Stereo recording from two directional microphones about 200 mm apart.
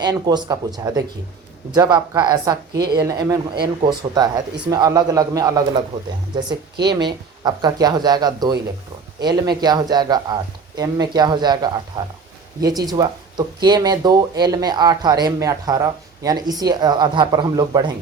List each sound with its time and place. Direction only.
0.0 s speech: 20° right (ahead or behind)
6.8 s speech: 20° right (ahead or behind)